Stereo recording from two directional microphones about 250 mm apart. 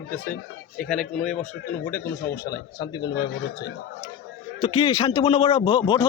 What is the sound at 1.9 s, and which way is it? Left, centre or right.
Speech, centre.